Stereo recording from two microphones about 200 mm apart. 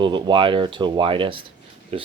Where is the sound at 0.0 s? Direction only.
25° right (ahead or behind).